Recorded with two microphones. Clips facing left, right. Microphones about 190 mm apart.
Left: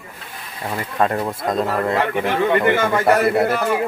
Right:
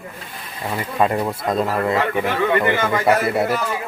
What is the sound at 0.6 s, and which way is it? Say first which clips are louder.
Speech: right 1 dB; 5° right (ahead or behind).